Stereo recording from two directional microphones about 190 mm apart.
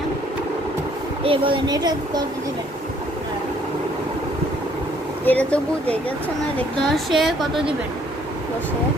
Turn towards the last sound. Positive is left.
turn(degrees=0)  # may be behind; listen again after turning